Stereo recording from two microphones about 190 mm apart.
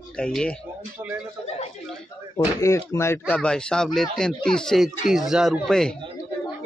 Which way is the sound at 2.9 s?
15° left (ahead or behind).